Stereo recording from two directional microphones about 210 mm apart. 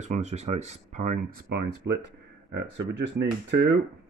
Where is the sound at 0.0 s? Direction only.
35° right (ahead or behind); by 3.7 s 55° right (ahead or behind).